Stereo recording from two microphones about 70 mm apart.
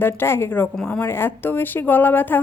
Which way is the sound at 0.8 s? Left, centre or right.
Left.